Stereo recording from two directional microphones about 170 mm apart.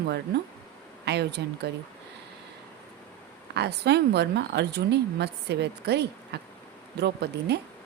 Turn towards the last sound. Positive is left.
turn(degrees=-75)  # may be behind; listen again after turning